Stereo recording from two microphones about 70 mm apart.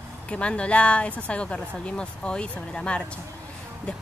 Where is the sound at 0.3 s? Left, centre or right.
Centre.